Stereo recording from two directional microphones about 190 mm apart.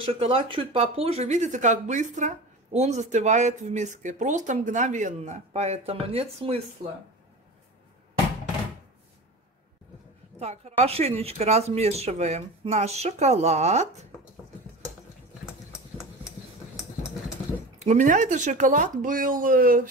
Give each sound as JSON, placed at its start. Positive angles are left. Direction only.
{"t": 0.0, "sound": "speech", "side_deg": -30}
{"t": 6.8, "sound": "speech", "side_deg": -55}
{"t": 10.4, "sound": "speech", "side_deg": -35}
{"t": 17.7, "sound": "speech", "side_deg": -40}